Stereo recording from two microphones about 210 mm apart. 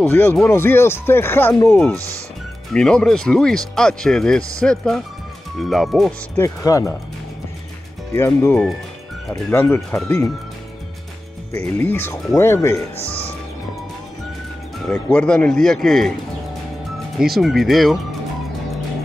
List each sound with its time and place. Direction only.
0.0 s speech: 10° left (ahead or behind)
2.0 s speech: 15° right (ahead or behind)
2.7 s a man's voice: 5° left (ahead or behind)
6.4 s speech: 15° left (ahead or behind)
8.2 s speech: 10° left (ahead or behind)
11.8 s speech: 10° left (ahead or behind)
14.9 s a man's voice: 5° left (ahead or behind)
17.2 s a man's voice: centre (ahead or behind)